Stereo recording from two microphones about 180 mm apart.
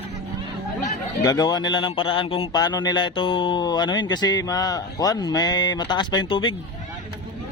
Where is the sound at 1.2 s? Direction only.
20° left (ahead or behind).